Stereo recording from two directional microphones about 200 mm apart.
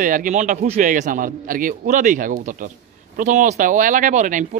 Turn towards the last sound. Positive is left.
turn(degrees=-40)  # may be behind; listen again after turning